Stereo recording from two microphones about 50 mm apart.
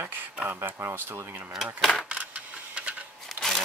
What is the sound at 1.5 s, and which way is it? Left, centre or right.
Speech, centre.